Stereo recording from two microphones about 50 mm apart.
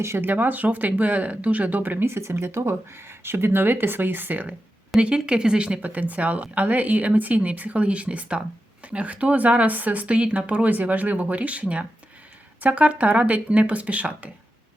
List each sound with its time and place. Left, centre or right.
0.2 s speech: right
2.0 s speech: right
4.9 s speech: centre
5.8 s speech: right